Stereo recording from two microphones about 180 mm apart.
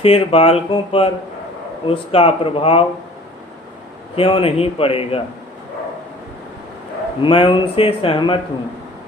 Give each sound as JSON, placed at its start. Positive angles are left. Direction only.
{"t": 0.0, "sound": "speech", "side_deg": 30}
{"t": 4.1, "sound": "speech", "side_deg": 30}
{"t": 7.2, "sound": "speech", "side_deg": 30}